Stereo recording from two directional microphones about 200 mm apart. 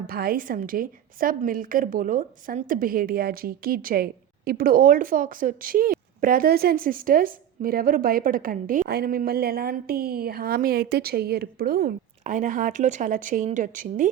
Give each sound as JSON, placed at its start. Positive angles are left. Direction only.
{"t": 0.1, "sound": "a woman's voice", "side_deg": -50}